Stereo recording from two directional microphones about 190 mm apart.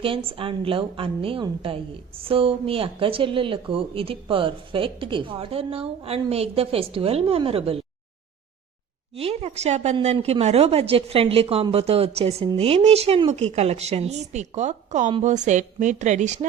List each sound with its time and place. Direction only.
0.0 s a woman's voice: 30° right (ahead or behind)
9.1 s a woman's voice: 30° right (ahead or behind)